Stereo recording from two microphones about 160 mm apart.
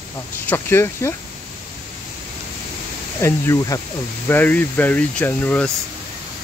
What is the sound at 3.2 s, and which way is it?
Speech, 15° left (ahead or behind).